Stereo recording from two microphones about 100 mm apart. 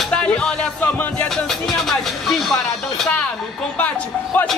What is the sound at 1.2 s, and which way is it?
Speech, 5° left (ahead or behind).